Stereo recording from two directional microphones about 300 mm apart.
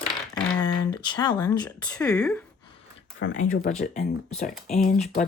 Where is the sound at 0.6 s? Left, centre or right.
Centre.